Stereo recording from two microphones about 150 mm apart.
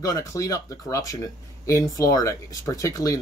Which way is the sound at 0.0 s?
20° left (ahead or behind).